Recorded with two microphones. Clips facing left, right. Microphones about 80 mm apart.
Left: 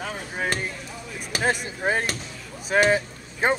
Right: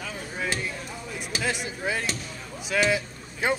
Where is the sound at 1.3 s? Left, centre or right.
Left.